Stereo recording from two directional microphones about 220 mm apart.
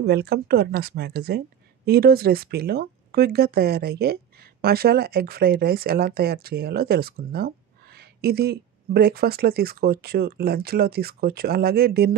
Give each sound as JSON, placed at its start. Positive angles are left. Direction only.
{"t": 0.0, "sound": "speech", "side_deg": -45}